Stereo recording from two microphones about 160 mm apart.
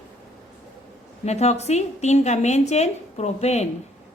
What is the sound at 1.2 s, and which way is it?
A woman's voice, 45° left (ahead or behind).